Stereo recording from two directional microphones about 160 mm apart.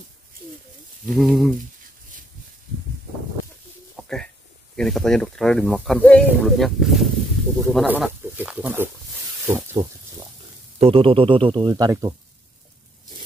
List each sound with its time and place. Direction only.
1.0 s speech: centre (ahead or behind)
3.9 s a sound: 5° left (ahead or behind)
4.7 s speech: 5° left (ahead or behind); by 9.8 s 15° right (ahead or behind)
10.8 s music: 35° right (ahead or behind)
11.7 s speech: 20° right (ahead or behind)